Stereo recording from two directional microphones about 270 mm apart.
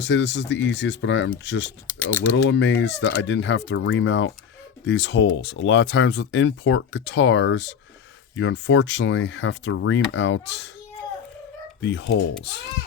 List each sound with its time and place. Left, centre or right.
0.0 s speech: left
1.9 s speech: centre
2.3 s speech: left
11.8 s speech: left